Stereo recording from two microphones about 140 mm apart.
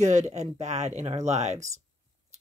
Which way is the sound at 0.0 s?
60° right (ahead or behind).